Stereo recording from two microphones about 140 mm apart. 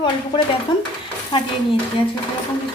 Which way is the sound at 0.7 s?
30° left (ahead or behind).